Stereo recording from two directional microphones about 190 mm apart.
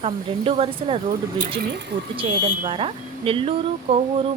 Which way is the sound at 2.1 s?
30° right (ahead or behind).